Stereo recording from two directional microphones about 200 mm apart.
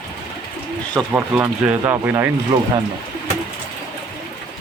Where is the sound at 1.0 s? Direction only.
10° right (ahead or behind).